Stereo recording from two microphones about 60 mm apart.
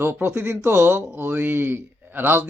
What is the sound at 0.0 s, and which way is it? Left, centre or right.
Speech, right.